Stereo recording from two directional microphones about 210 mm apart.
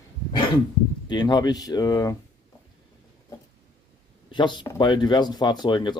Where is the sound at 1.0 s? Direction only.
20° left (ahead or behind).